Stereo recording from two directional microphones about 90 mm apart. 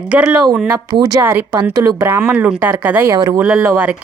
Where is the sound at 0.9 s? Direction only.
50° right (ahead or behind).